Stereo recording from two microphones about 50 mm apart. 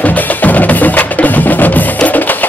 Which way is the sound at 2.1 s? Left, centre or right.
Left.